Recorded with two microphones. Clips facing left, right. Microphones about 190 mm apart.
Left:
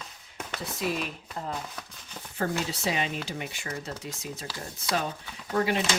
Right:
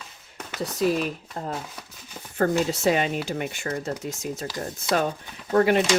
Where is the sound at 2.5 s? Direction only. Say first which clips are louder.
Right 8 dB; 45° right (ahead or behind).